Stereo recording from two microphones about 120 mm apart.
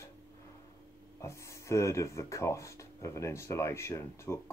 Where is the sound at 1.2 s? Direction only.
25° left (ahead or behind).